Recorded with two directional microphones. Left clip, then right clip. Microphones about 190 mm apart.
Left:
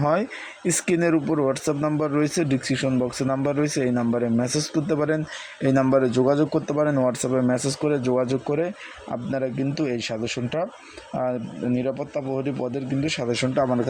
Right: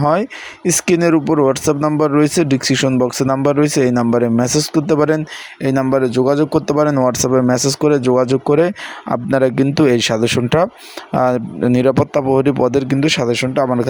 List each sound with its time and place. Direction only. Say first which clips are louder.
0.0 s speech: right 7 dB; 20° right (ahead or behind)
5.6 s speech: right 4 dB; 15° right (ahead or behind)